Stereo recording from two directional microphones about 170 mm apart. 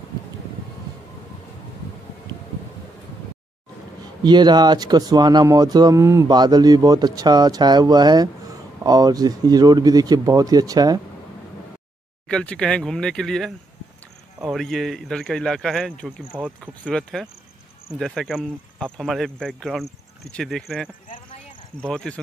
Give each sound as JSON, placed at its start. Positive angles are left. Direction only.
{"t": 4.2, "sound": "speech", "side_deg": -25}
{"t": 12.3, "sound": "speech", "side_deg": 5}
{"t": 16.3, "sound": "speech", "side_deg": -10}
{"t": 16.9, "sound": "speech", "side_deg": 0}